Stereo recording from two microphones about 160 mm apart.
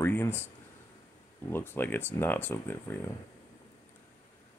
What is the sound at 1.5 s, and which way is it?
Speech, 15° left (ahead or behind).